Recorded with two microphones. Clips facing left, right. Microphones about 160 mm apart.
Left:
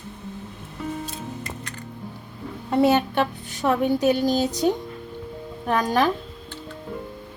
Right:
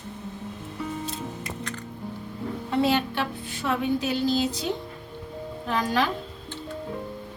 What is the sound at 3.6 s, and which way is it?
Speech, 50° left (ahead or behind).